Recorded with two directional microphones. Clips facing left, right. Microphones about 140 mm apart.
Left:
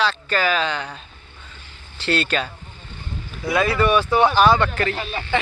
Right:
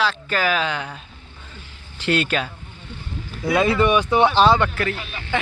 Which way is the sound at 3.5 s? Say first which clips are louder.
Right 1 dB; 20° right (ahead or behind).